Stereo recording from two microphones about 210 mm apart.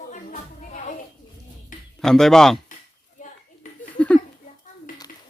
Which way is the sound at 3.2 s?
40° left (ahead or behind).